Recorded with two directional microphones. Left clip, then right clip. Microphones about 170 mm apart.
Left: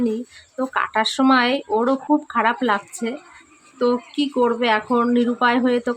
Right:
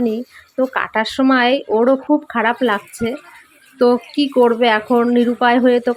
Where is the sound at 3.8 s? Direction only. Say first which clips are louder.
Right 6 dB; 25° right (ahead or behind).